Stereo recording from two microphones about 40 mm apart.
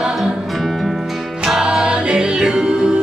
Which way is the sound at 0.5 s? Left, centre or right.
Centre.